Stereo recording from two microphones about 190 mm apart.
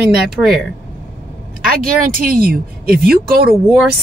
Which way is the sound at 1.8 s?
50° right (ahead or behind).